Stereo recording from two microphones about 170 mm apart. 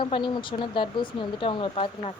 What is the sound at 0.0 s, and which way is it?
Speech, 30° left (ahead or behind).